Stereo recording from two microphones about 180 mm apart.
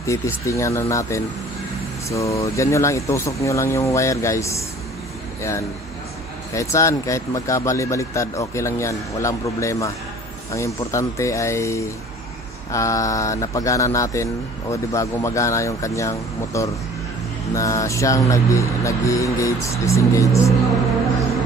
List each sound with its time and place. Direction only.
0.0 s speech: 15° left (ahead or behind)
6.5 s speech: 15° left (ahead or behind)